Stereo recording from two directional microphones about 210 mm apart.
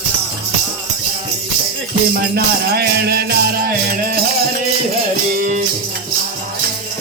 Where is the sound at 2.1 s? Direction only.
50° right (ahead or behind).